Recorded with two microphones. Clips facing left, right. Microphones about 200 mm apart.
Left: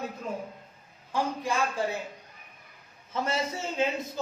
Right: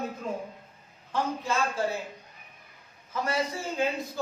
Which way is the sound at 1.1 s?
15° left (ahead or behind).